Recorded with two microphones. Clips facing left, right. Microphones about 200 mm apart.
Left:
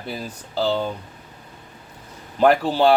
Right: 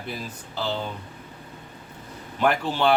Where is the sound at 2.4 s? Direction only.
35° left (ahead or behind).